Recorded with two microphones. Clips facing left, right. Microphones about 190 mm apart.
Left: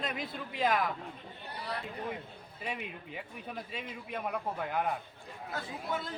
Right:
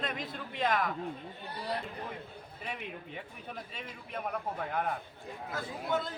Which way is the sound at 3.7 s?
Centre (ahead or behind).